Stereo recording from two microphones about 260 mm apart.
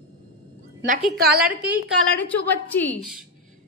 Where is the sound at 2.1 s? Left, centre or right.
Centre.